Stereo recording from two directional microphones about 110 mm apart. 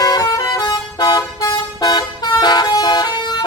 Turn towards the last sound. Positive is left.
turn(degrees=40)  # may be behind; listen again after turning